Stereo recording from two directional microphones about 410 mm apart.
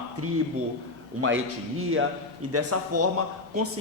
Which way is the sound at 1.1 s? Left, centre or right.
Right.